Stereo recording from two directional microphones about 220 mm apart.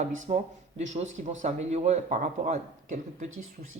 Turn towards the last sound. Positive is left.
turn(degrees=-35)  # may be behind; listen again after turning